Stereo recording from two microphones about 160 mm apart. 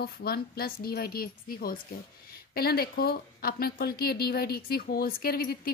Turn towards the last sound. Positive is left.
turn(degrees=70)  # may be behind; listen again after turning